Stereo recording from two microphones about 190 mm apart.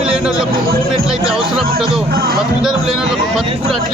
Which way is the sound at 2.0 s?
55° right (ahead or behind).